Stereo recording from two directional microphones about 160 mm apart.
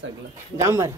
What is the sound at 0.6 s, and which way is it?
Speech, 20° right (ahead or behind).